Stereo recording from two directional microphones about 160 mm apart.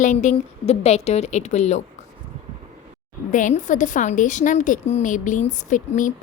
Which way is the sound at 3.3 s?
50° left (ahead or behind).